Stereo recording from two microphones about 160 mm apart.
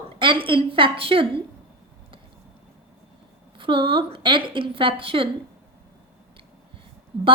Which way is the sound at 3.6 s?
35° right (ahead or behind).